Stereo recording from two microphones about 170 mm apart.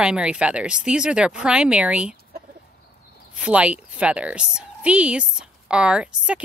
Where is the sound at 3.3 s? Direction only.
5° right (ahead or behind).